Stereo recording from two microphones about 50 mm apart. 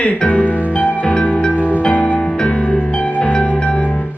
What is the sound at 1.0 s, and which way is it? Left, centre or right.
Music, centre.